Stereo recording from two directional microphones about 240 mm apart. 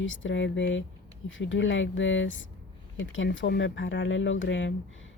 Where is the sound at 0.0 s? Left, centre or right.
Left.